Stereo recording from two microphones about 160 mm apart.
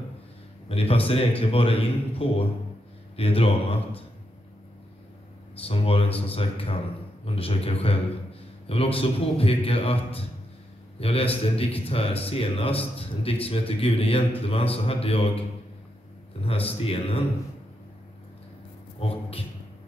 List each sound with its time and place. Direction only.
0.7 s speech: 35° left (ahead or behind)
5.6 s speech: 35° left (ahead or behind)
16.4 s speech: 35° left (ahead or behind)
18.9 s a man's voice: 40° left (ahead or behind)